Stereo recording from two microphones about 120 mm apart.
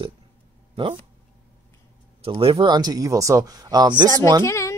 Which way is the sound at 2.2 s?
50° right (ahead or behind).